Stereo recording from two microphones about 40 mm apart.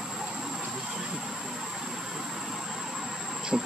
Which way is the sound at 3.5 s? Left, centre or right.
Centre.